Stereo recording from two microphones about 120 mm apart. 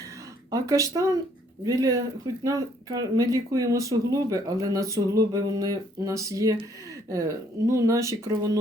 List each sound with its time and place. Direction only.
0.5 s speech: 25° right (ahead or behind)